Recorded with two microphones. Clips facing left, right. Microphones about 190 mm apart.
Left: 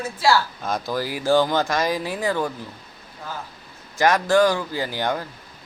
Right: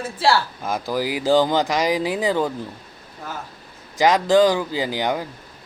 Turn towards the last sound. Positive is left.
turn(degrees=-15)  # may be behind; listen again after turning